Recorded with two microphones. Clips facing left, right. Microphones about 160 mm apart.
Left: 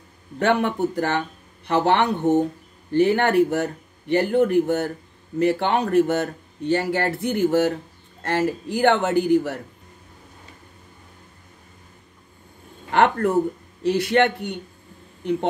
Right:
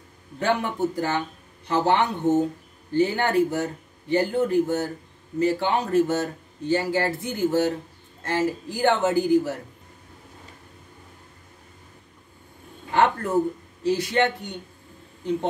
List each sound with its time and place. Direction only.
0.4 s speech: 65° left (ahead or behind)
12.9 s speech: 65° left (ahead or behind)